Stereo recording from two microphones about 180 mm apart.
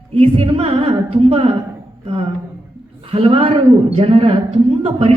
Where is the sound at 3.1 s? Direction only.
30° right (ahead or behind).